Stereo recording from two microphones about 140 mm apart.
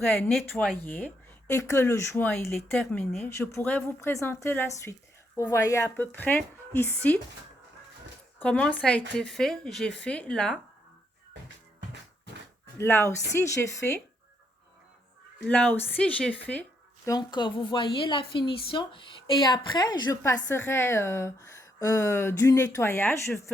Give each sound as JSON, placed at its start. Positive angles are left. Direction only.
{"t": 0.1, "sound": "a woman's voice", "side_deg": 0}
{"t": 2.7, "sound": "speech", "side_deg": 5}
{"t": 3.2, "sound": "a woman's voice", "side_deg": 15}
{"t": 8.4, "sound": "speech", "side_deg": 10}
{"t": 12.7, "sound": "speech", "side_deg": 20}
{"t": 15.4, "sound": "a woman's voice", "side_deg": 15}
{"t": 17.1, "sound": "a woman's voice", "side_deg": 30}
{"t": 20.3, "sound": "a woman's voice", "side_deg": 15}